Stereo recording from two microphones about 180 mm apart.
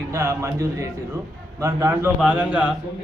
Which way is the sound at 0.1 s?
15° right (ahead or behind).